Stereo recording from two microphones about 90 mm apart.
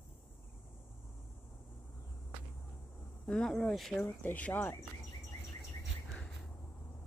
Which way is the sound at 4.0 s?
20° left (ahead or behind).